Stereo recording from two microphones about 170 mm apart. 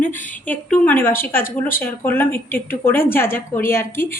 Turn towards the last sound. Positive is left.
turn(degrees=15)  # may be behind; listen again after turning